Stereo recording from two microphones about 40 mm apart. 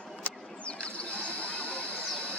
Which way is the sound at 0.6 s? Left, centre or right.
Left.